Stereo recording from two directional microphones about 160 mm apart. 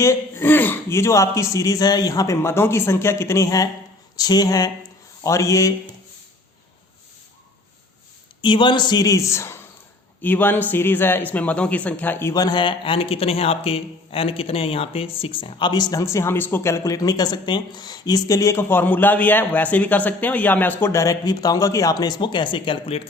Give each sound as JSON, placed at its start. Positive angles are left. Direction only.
{"t": 0.0, "sound": "speech", "side_deg": 15}
{"t": 8.4, "sound": "speech", "side_deg": 30}
{"t": 12.3, "sound": "speech", "side_deg": 25}